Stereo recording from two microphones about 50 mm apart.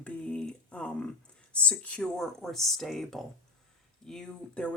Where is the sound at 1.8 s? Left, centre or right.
Left.